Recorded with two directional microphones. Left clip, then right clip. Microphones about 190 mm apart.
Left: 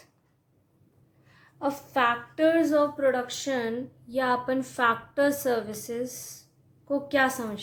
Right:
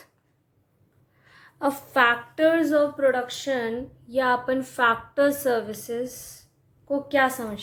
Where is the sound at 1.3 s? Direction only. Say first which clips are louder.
Right 4 dB; 35° right (ahead or behind).